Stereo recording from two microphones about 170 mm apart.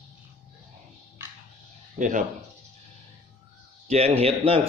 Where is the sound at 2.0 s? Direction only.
50° right (ahead or behind).